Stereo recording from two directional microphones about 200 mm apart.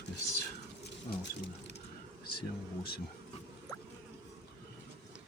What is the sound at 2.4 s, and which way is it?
Speech, 50° left (ahead or behind).